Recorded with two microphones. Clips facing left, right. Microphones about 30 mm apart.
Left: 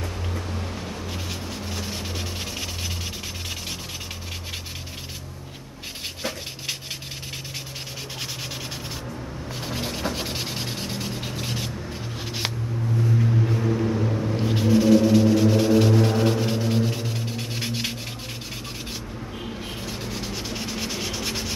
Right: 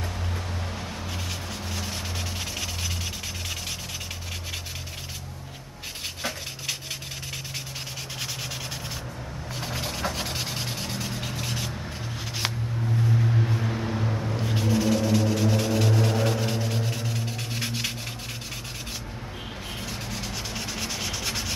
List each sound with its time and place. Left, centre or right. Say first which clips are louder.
0.5 s vehicle: left 2 dB; centre
9.6 s rub: left 1 dB; centre
12.4 s a sound: left 1 dB; centre
12.9 s vehicle: left 2 dB; centre
14.3 s music: left 6 dB; centre
19.8 s rub: left 1 dB; centre